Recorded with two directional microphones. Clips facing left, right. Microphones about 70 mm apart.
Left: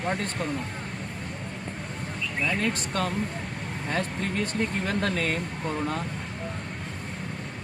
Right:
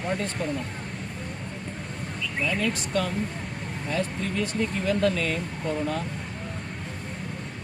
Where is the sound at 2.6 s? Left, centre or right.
Left.